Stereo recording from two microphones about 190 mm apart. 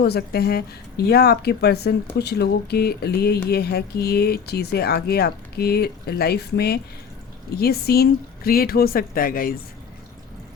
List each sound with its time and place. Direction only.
0.0 s speech: 55° left (ahead or behind)